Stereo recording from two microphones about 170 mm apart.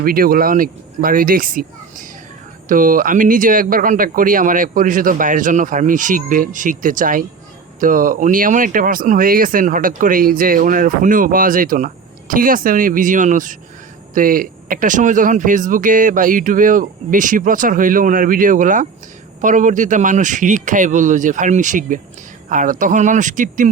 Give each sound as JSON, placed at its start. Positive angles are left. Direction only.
{"t": 0.0, "sound": "speech", "side_deg": -60}